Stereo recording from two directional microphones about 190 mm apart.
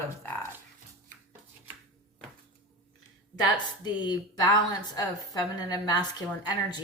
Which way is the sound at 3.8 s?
20° left (ahead or behind).